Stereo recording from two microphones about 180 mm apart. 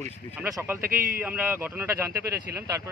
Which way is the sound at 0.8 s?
50° right (ahead or behind).